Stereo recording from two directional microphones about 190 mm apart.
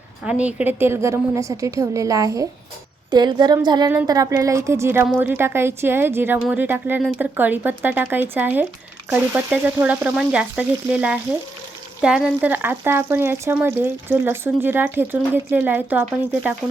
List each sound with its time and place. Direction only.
0.3 s a woman's voice: 5° right (ahead or behind)